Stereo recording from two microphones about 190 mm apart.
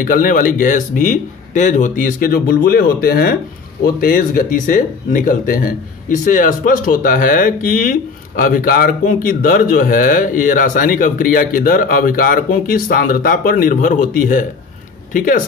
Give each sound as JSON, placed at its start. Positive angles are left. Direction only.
{"t": 0.0, "sound": "speech", "side_deg": 45}